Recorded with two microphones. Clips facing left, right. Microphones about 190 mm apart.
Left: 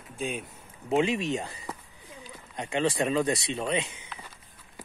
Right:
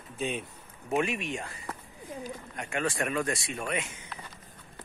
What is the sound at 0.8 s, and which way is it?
Speech, 25° left (ahead or behind).